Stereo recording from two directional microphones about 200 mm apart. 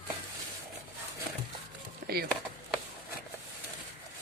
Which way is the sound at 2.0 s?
50° right (ahead or behind).